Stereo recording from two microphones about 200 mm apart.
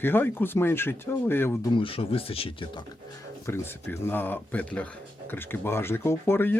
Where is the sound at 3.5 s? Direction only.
10° left (ahead or behind).